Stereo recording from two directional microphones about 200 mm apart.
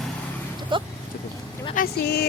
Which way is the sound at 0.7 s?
25° right (ahead or behind).